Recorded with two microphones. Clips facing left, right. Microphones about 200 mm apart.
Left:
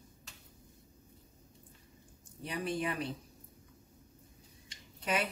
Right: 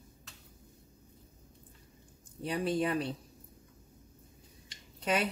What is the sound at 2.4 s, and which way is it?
Speech, 30° right (ahead or behind).